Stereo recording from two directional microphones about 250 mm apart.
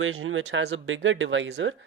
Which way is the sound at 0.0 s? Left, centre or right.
Right.